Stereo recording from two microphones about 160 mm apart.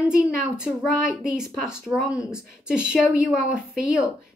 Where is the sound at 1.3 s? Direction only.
5° right (ahead or behind).